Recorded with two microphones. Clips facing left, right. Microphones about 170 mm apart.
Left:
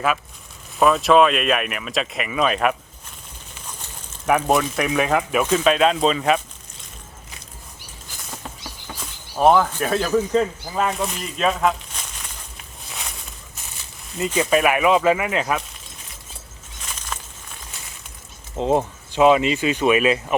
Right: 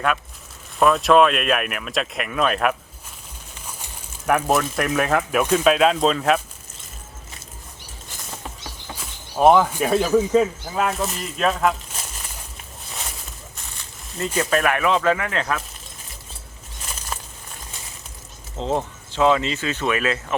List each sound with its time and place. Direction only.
0.8 s speech: centre (ahead or behind)
4.3 s speech: centre (ahead or behind)
9.3 s speech: 10° right (ahead or behind)
12.9 s a sound: centre (ahead or behind)
14.3 s speech: 10° left (ahead or behind)
18.5 s speech: 15° left (ahead or behind)